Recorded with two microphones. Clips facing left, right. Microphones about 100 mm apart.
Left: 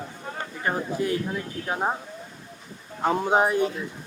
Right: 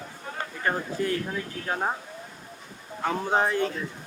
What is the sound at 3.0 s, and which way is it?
Speech, 20° left (ahead or behind).